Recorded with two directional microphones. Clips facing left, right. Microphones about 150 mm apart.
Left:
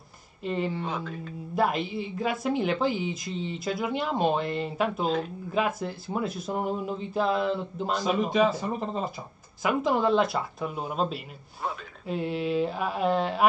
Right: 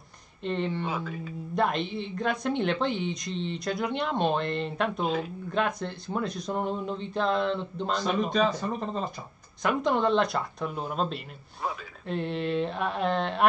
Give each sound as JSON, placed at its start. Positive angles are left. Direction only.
{"t": 0.4, "sound": "speech", "side_deg": 5}